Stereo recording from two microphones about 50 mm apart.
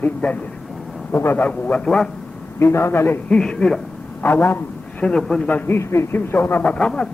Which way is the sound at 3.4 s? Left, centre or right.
Centre.